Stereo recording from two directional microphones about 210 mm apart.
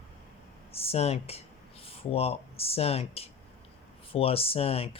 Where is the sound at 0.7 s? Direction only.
30° left (ahead or behind).